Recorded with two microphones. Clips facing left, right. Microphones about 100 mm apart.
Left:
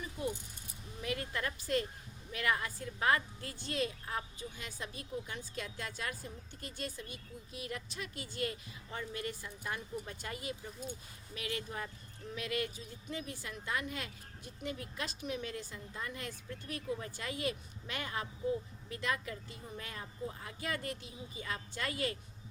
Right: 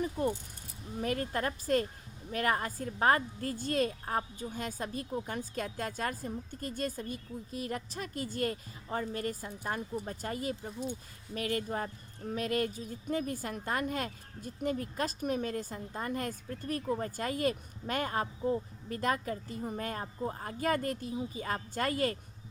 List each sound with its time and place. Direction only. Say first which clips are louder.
0.0 s a woman's voice: right 7 dB; 50° right (ahead or behind)